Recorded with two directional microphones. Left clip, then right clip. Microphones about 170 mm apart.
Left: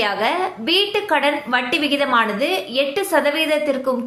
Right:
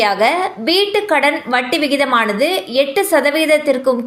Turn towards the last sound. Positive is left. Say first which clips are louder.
# right 6 dB
turn(degrees=-20)  # may be behind; listen again after turning